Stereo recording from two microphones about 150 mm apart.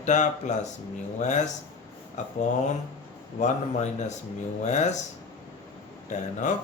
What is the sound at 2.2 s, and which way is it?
Speech, 50° left (ahead or behind).